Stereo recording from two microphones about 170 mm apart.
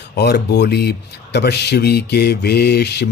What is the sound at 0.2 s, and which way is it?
Speech, 75° left (ahead or behind).